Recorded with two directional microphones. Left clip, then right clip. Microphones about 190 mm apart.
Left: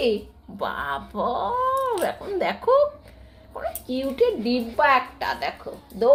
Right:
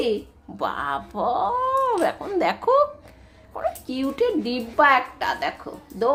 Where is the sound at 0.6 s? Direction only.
15° right (ahead or behind).